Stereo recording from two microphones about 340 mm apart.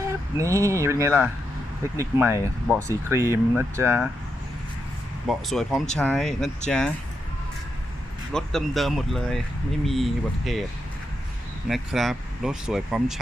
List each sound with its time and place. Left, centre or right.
0.3 s speech: centre
5.3 s speech: centre
8.3 s speech: centre
11.7 s speech: centre